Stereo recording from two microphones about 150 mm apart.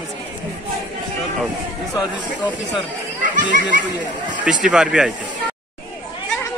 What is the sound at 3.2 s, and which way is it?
Speech, 60° right (ahead or behind).